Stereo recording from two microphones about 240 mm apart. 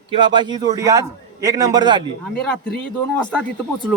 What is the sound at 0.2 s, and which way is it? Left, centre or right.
A man's voice, centre.